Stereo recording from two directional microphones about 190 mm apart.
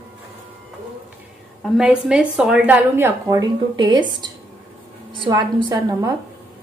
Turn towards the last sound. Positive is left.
turn(degrees=-20)  # may be behind; listen again after turning